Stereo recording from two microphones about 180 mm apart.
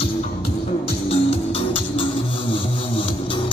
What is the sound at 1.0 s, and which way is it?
Music, 30° left (ahead or behind).